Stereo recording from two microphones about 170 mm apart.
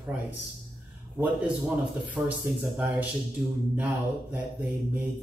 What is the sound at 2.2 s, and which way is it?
Speech, 10° right (ahead or behind).